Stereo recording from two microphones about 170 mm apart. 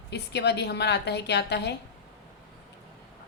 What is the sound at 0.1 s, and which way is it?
Speech, 80° left.